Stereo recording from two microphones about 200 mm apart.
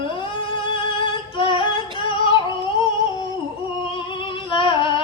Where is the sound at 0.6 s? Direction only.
25° left (ahead or behind).